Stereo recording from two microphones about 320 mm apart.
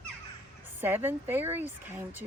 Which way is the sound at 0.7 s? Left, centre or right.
Centre.